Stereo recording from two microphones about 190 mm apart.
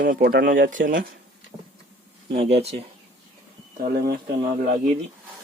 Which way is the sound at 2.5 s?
35° right (ahead or behind).